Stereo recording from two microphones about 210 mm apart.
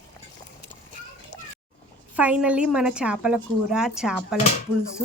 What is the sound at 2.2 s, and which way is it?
Speech, 5° right (ahead or behind).